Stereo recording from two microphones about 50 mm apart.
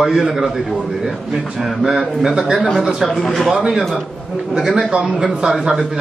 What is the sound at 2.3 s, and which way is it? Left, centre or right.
Speech, centre.